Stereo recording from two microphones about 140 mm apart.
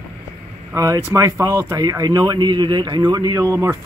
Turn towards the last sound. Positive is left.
turn(degrees=-20)  # may be behind; listen again after turning